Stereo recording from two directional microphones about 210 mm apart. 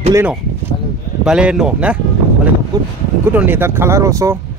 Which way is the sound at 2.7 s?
15° right (ahead or behind).